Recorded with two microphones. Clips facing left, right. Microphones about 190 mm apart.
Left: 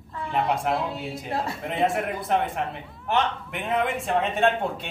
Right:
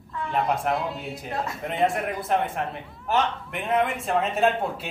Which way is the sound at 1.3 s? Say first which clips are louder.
Left 1 dB; 30° left (ahead or behind).